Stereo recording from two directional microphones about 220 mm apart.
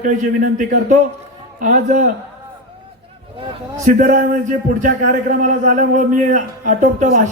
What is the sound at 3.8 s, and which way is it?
A man's voice, 35° right (ahead or behind).